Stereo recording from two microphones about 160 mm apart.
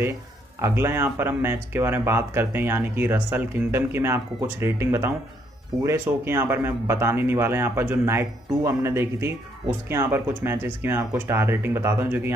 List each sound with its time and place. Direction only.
0.6 s speech: 15° right (ahead or behind)